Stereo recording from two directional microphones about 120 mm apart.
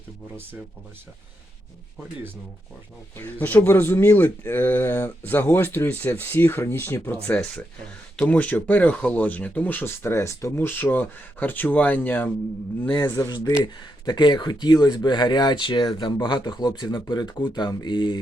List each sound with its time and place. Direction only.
3.2 s speech: 15° left (ahead or behind)
7.3 s speech: 10° left (ahead or behind); by 18.2 s 40° left (ahead or behind)